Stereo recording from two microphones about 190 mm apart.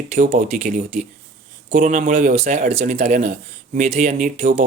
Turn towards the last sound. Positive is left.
turn(degrees=-45)  # may be behind; listen again after turning